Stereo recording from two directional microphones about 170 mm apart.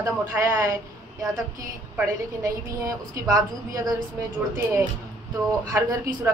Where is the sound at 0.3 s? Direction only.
20° right (ahead or behind).